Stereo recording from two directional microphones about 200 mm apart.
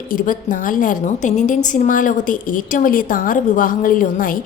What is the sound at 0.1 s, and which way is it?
A woman's voice, 45° left (ahead or behind).